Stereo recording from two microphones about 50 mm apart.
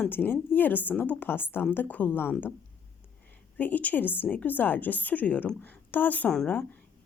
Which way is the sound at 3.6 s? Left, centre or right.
Left.